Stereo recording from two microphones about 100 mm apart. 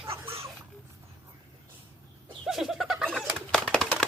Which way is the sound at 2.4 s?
5° right (ahead or behind).